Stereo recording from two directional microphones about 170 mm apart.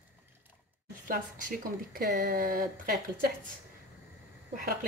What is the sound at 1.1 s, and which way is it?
Speech, 55° right (ahead or behind).